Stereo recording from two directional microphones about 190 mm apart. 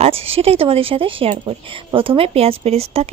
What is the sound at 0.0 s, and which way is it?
A woman's voice, 30° right (ahead or behind).